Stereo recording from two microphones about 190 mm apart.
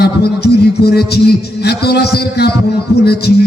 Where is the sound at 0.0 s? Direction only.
60° left (ahead or behind).